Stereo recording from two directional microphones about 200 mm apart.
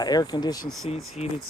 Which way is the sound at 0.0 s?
20° left (ahead or behind).